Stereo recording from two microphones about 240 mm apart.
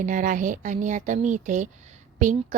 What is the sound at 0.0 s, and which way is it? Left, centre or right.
Speech, right.